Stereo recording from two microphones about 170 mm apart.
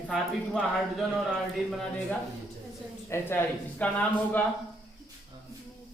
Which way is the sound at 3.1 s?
10° left (ahead or behind).